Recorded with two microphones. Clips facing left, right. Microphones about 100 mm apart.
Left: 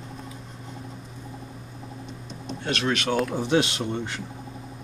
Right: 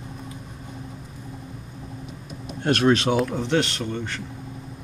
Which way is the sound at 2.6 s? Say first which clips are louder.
Right 8 dB; 50° right (ahead or behind).